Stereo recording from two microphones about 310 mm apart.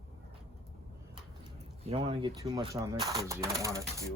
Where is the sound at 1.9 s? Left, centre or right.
Centre.